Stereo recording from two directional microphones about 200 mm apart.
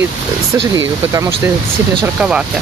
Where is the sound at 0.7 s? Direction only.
15° right (ahead or behind).